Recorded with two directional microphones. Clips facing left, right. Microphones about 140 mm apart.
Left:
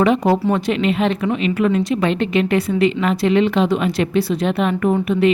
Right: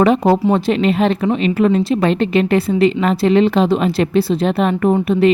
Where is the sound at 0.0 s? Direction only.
35° right (ahead or behind).